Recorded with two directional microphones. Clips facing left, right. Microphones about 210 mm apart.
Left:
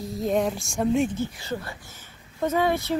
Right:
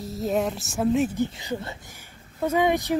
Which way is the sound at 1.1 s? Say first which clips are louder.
Right 2 dB; 15° right (ahead or behind).